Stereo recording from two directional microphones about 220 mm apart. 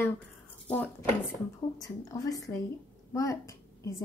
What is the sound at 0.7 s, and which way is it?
A woman's voice, 10° left (ahead or behind).